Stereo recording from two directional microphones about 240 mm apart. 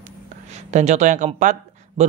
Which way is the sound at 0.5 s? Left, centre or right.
Right.